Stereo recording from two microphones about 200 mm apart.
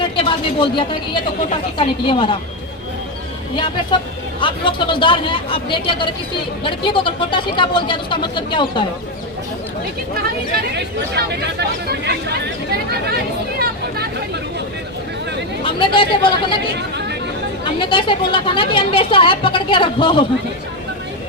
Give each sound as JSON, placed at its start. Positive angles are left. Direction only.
{"t": 0.0, "sound": "a woman's voice", "side_deg": 25}
{"t": 3.5, "sound": "speech", "side_deg": 25}
{"t": 10.6, "sound": "speech", "side_deg": -55}
{"t": 13.6, "sound": "a sound", "side_deg": -50}
{"t": 15.6, "sound": "speech", "side_deg": 25}
{"t": 17.7, "sound": "speech", "side_deg": 25}